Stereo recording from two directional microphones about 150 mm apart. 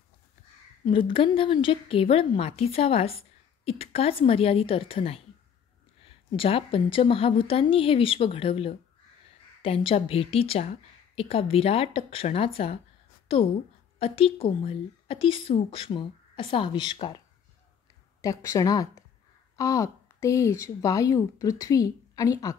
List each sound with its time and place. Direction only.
0.8 s a woman's voice: 35° left (ahead or behind)
18.2 s a woman's voice: 20° left (ahead or behind)